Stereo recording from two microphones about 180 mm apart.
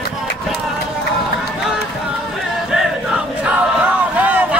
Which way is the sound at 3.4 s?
10° right (ahead or behind).